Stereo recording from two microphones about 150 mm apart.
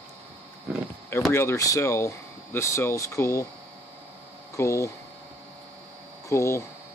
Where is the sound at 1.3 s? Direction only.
15° left (ahead or behind).